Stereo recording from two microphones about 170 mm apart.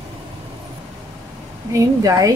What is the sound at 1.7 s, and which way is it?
Speech, 20° right (ahead or behind).